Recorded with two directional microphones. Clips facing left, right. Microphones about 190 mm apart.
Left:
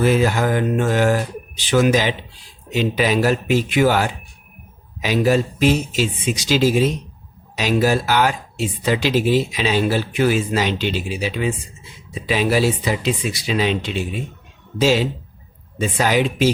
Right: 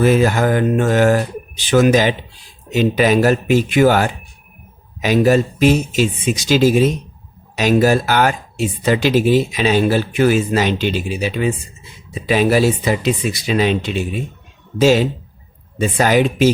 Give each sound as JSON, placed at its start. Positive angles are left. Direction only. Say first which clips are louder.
{"t": 0.0, "sound": "speech", "louder": "right 3 dB", "side_deg": -45}